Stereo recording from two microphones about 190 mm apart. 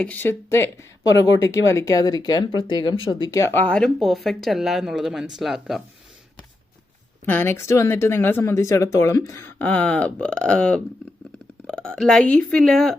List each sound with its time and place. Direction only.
0.0 s speech: 10° left (ahead or behind)
7.3 s speech: 10° left (ahead or behind)